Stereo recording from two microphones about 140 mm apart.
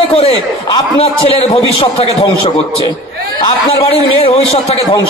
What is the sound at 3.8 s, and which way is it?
A man's voice, 45° left (ahead or behind).